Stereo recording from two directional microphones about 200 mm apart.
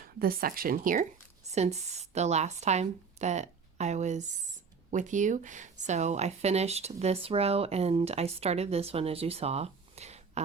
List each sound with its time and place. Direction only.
0.0 s speech: 45° right (ahead or behind)
1.5 s speech: 35° right (ahead or behind)